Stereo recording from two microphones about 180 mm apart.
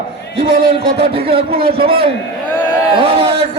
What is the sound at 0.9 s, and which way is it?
A man's voice, 35° right (ahead or behind).